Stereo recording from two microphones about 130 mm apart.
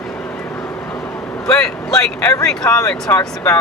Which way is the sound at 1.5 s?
25° left (ahead or behind).